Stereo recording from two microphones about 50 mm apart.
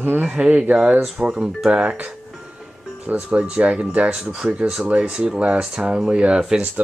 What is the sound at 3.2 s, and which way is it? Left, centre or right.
Speech, right.